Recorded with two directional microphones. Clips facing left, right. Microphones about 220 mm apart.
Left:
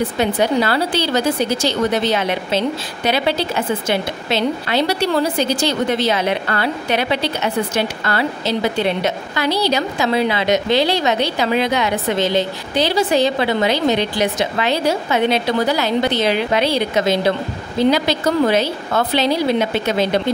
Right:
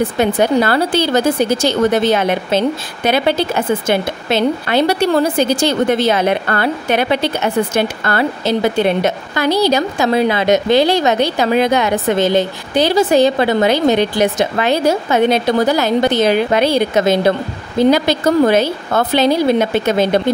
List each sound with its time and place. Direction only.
0.2 s a woman's voice: 50° right (ahead or behind)